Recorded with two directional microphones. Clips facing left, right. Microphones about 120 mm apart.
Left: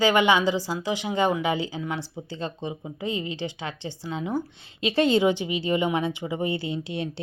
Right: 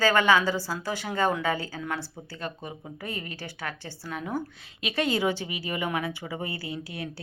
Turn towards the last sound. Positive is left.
turn(degrees=25)  # may be behind; listen again after turning